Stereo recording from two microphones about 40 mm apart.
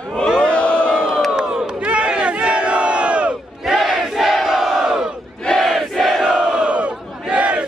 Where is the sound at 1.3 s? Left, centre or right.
Right.